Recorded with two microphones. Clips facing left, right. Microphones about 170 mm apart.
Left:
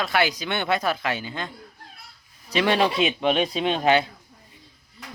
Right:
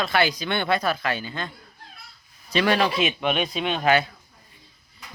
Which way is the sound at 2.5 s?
20° left (ahead or behind).